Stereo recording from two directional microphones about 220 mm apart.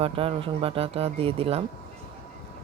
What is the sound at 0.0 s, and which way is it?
Speech, 25° right (ahead or behind).